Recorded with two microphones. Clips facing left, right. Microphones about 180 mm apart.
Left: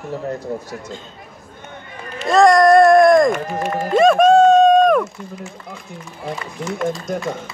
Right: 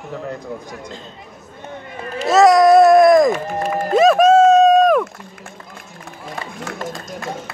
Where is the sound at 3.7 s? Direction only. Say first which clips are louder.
Even; centre (ahead or behind).